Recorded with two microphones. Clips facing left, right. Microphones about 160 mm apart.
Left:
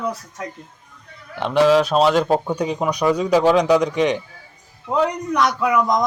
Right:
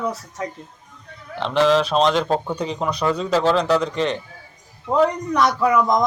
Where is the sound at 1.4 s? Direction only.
10° left (ahead or behind).